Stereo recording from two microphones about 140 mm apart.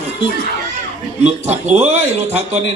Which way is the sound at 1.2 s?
50° right (ahead or behind).